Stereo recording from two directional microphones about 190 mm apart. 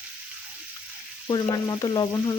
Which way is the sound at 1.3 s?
20° left (ahead or behind).